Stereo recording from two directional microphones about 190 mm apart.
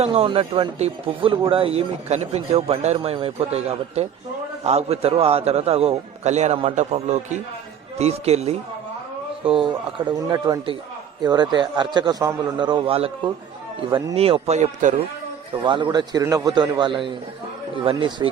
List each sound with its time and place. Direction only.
0.0 s a man's voice: 30° right (ahead or behind)
15.6 s a man's voice: 25° right (ahead or behind)